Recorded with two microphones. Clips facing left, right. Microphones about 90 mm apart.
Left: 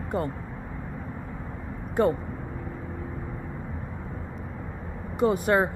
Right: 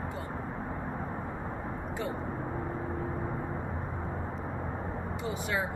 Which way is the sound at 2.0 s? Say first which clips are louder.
Left 14 dB; 55° left (ahead or behind).